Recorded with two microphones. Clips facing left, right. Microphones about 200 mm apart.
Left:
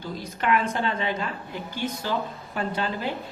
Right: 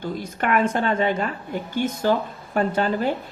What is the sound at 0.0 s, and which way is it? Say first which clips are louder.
Speech: right 3 dB; 50° right (ahead or behind).